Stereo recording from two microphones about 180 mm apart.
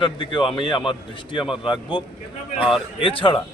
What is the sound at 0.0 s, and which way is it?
A man's voice, 25° left (ahead or behind).